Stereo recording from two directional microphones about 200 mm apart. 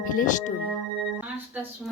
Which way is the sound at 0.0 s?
45° left (ahead or behind).